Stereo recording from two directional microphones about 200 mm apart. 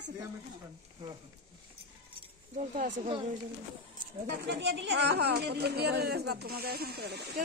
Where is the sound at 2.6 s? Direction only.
35° right (ahead or behind).